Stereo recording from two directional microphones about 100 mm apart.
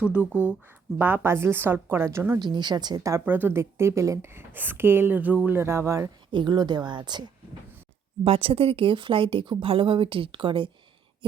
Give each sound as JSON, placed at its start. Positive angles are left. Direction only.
{"t": 0.0, "sound": "speech", "side_deg": -10}
{"t": 2.4, "sound": "speech", "side_deg": -45}
{"t": 3.2, "sound": "speech", "side_deg": -20}
{"t": 6.3, "sound": "speech", "side_deg": -50}
{"t": 8.2, "sound": "speech", "side_deg": -70}